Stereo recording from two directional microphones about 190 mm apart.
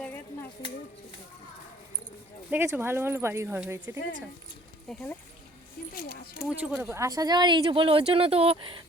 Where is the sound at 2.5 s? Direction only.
10° right (ahead or behind).